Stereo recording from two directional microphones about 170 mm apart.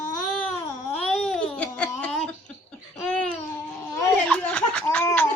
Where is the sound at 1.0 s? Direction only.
5° left (ahead or behind).